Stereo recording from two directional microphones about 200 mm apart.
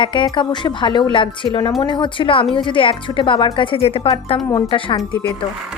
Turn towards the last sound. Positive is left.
turn(degrees=25)  # may be behind; listen again after turning